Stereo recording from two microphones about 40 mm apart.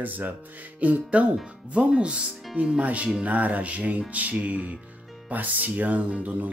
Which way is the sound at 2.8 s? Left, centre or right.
Right.